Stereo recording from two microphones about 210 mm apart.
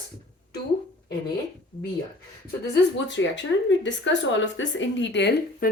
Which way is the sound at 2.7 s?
60° left (ahead or behind).